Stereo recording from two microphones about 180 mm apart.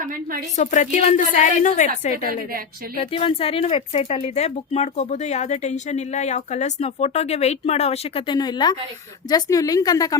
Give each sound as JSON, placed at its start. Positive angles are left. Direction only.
{"t": 0.0, "sound": "a woman's voice", "side_deg": -50}
{"t": 0.5, "sound": "a woman's voice", "side_deg": 40}
{"t": 2.9, "sound": "a woman's voice", "side_deg": 30}